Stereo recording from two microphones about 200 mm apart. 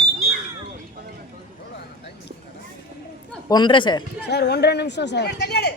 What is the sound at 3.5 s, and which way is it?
Speech, 20° left (ahead or behind).